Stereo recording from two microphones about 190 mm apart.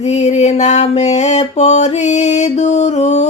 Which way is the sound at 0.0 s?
35° left (ahead or behind).